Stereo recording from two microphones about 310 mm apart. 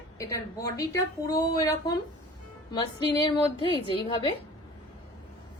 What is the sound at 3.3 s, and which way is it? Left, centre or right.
A woman's voice, centre.